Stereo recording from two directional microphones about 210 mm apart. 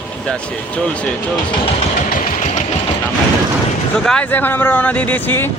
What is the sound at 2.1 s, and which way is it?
Engine, 40° left (ahead or behind).